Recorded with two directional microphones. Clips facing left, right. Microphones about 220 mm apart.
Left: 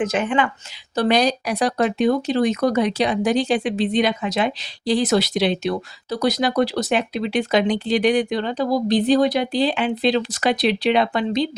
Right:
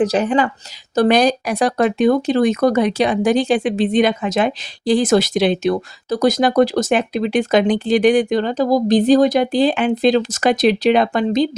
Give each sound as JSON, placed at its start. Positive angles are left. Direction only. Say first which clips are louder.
{"t": 0.0, "sound": "speech", "louder": "right 4 dB", "side_deg": -40}
{"t": 0.9, "sound": "speech", "louder": "right 4 dB", "side_deg": -50}